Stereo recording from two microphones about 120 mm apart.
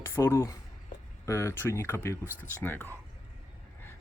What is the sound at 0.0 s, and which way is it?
Speech, 20° left (ahead or behind).